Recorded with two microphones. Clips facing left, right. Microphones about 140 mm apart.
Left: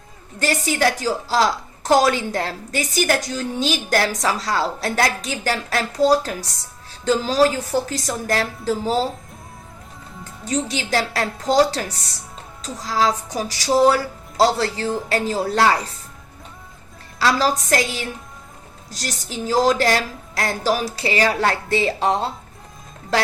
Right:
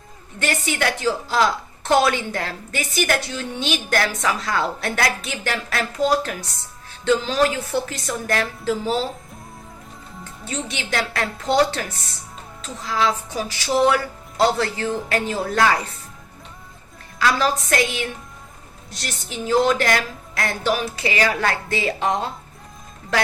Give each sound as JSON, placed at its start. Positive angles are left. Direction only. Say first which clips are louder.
{"t": 0.3, "sound": "a woman's voice", "louder": "left 3 dB", "side_deg": 35}
{"t": 10.4, "sound": "a woman's voice", "louder": "left 6 dB", "side_deg": 40}
{"t": 17.2, "sound": "a woman's voice", "louder": "left 1 dB", "side_deg": 35}